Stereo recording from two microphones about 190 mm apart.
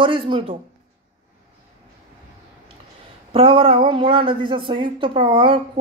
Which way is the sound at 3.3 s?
30° right (ahead or behind).